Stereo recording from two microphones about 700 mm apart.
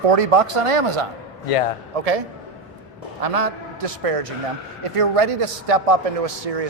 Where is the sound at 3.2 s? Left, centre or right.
Right.